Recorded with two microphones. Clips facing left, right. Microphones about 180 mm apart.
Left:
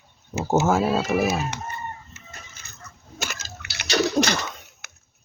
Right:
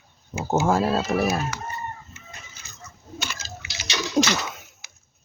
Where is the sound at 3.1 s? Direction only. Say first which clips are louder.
Even; 50° left (ahead or behind).